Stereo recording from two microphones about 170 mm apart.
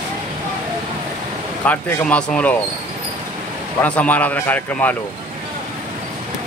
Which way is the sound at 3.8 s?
10° left (ahead or behind).